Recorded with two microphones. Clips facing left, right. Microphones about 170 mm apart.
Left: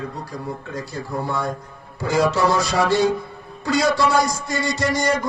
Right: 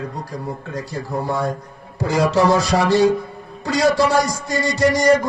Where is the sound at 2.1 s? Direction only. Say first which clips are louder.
Right 2 dB; 35° right (ahead or behind).